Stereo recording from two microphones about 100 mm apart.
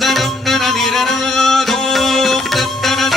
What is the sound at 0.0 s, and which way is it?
Music, centre (ahead or behind).